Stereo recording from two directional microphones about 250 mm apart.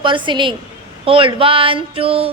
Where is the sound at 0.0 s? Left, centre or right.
Centre.